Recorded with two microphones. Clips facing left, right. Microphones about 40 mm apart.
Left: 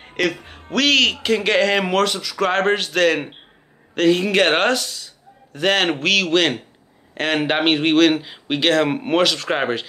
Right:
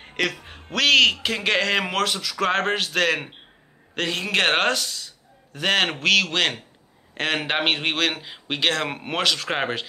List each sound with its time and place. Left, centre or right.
0.0 s music: centre
0.5 s a man's voice: centre